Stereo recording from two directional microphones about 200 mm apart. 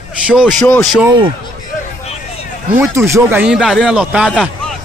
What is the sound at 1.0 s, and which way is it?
Speech, 25° right (ahead or behind).